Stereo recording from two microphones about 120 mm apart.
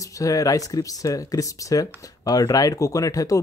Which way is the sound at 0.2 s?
30° left (ahead or behind).